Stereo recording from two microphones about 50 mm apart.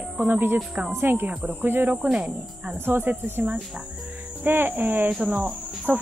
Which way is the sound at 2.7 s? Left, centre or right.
Right.